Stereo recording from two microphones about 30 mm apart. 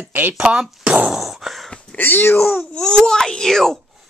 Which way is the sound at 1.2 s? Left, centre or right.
Centre.